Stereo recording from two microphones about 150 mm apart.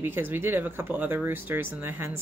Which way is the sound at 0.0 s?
15° right (ahead or behind).